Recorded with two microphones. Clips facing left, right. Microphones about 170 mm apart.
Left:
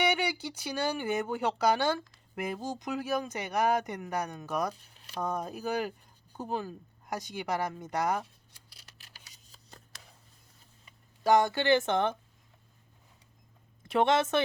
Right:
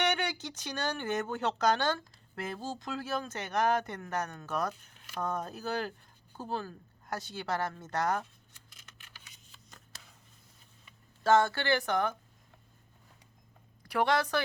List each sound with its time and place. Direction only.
0.0 s speech: 10° left (ahead or behind)
4.7 s a sound: 35° left (ahead or behind)
5.2 s speech: 10° left (ahead or behind)
8.5 s scissors: 35° left (ahead or behind)
9.2 s a sound: 35° left (ahead or behind)
11.2 s speech: 15° left (ahead or behind)
13.8 s speech: 25° left (ahead or behind)